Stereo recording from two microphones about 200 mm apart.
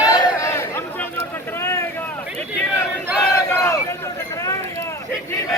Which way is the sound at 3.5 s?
15° left (ahead or behind).